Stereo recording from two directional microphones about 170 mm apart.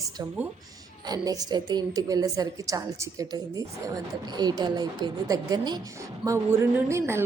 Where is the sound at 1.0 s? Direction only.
20° right (ahead or behind).